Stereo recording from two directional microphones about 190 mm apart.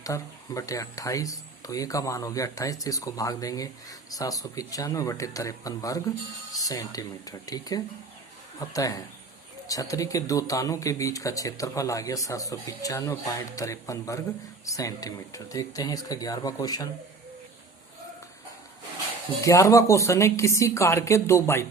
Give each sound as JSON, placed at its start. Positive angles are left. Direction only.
{"t": 0.0, "sound": "speech", "side_deg": 15}
{"t": 19.4, "sound": "speech", "side_deg": 15}